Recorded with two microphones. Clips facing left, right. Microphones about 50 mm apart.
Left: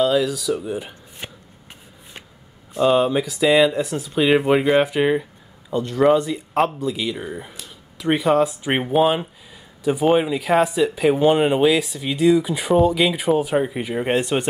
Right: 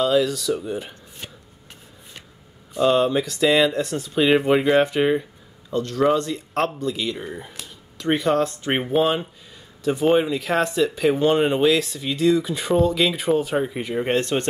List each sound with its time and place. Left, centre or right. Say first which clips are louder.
0.0 s speech: left 1 dB; centre
1.2 s chopping: left 3 dB; left
2.7 s speech: left 1 dB; centre